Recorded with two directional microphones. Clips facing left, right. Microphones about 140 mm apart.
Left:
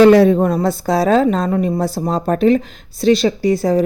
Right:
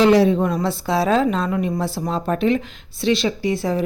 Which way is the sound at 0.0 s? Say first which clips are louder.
Left 6 dB; 50° left (ahead or behind).